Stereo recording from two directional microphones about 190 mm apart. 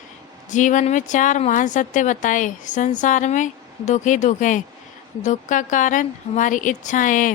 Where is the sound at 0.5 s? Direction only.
40° left (ahead or behind).